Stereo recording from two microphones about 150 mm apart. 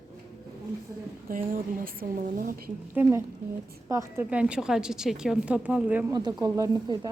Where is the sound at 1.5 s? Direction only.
65° right (ahead or behind).